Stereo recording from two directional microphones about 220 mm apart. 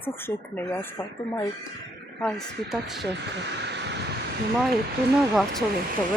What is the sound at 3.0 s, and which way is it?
Speech, 50° right (ahead or behind).